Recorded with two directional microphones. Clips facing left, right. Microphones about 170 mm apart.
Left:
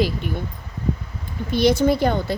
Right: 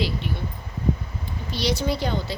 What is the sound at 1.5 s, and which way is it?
Speech, 55° left (ahead or behind).